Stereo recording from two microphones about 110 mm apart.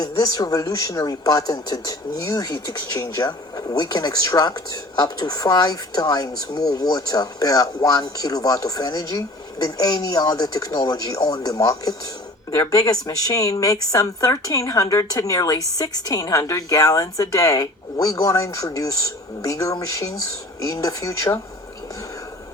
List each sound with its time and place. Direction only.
0.0 s speech: 35° left (ahead or behind)